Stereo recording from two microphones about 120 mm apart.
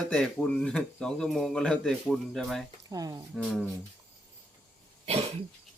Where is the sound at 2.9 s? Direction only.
30° right (ahead or behind).